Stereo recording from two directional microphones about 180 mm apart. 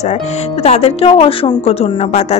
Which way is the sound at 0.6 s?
35° left (ahead or behind).